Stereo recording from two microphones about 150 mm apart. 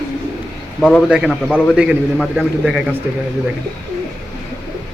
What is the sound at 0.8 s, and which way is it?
Speech, 10° left (ahead or behind).